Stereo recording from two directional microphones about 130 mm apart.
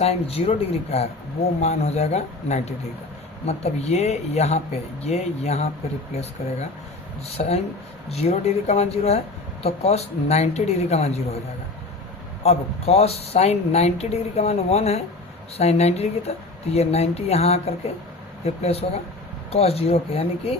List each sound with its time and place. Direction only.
0.0 s speech: 50° left (ahead or behind)
7.3 s speech: 55° left (ahead or behind)
12.4 s speech: 55° left (ahead or behind)